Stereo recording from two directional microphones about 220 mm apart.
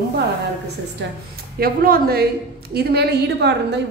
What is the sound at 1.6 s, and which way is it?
A woman's voice, 40° right (ahead or behind).